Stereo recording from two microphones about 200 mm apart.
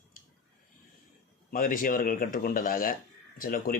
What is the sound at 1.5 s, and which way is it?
Speech, 45° left (ahead or behind).